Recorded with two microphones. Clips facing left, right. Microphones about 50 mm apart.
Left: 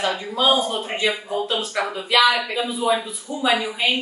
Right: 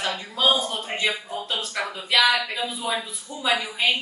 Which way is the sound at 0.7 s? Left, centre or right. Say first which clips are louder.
Left 4 dB; centre.